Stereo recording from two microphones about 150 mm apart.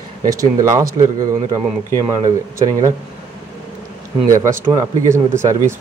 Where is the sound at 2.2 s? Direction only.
25° right (ahead or behind).